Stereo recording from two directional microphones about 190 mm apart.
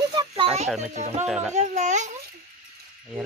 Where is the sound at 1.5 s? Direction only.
40° right (ahead or behind).